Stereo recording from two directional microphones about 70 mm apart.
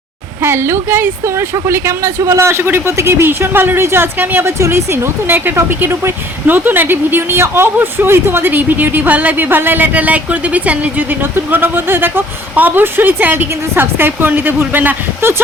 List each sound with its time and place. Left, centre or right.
0.4 s speech: right